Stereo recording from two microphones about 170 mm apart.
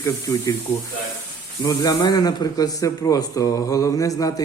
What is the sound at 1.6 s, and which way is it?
Speech, 20° left (ahead or behind).